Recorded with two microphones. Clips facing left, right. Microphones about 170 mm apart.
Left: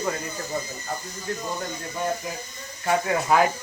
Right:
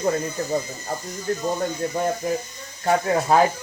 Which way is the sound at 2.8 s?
35° right (ahead or behind).